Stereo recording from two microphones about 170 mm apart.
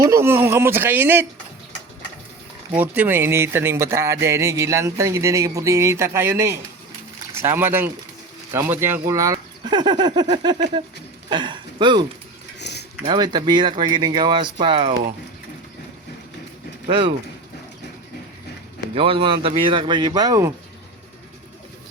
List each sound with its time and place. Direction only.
0.0 s speech: 15° right (ahead or behind)
2.7 s speech: 10° right (ahead or behind); by 12.0 s 30° right (ahead or behind)
12.5 s a sound: 85° left
13.1 s speech: 25° right (ahead or behind)
16.8 s speech: 30° right (ahead or behind)
18.9 s speech: 30° right (ahead or behind)